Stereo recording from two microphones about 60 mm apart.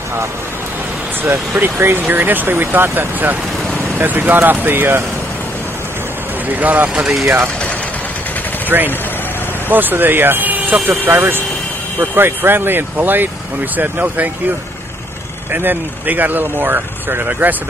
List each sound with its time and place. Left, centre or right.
1.5 s speech: right
6.6 s speech: right
7.2 s speech: right
8.6 s speech: right
15.5 s speech: right